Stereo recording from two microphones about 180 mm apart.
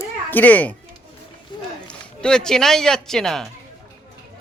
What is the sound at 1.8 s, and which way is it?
Speech, 5° left (ahead or behind).